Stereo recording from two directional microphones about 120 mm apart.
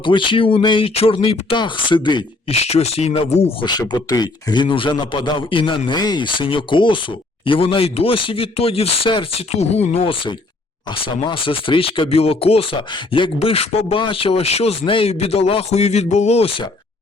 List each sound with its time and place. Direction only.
0.0 s speech: 45° left (ahead or behind)
2.5 s speech: 60° left (ahead or behind)
3.6 s a man's voice: 35° left (ahead or behind)
9.6 s speech: 60° left (ahead or behind)